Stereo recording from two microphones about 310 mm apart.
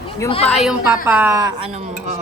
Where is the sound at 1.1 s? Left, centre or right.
Centre.